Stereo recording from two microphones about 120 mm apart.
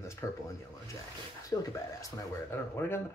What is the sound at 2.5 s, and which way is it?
Speech, 20° left (ahead or behind).